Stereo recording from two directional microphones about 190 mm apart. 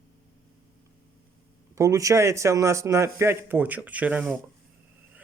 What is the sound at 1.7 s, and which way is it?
Speech, 15° right (ahead or behind).